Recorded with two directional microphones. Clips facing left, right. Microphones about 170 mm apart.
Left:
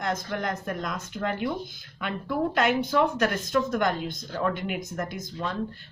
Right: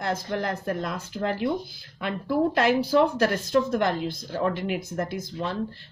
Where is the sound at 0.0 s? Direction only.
30° right (ahead or behind).